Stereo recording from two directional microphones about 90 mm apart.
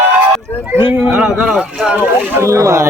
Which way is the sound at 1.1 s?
10° right (ahead or behind).